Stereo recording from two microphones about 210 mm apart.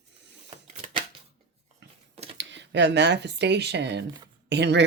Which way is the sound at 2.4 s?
60° right (ahead or behind).